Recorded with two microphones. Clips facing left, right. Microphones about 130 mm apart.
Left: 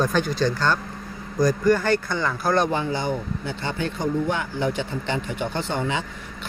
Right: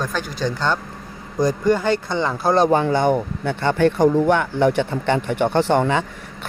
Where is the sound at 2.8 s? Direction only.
65° right (ahead or behind).